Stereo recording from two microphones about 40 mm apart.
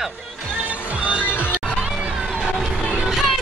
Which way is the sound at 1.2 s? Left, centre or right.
Left.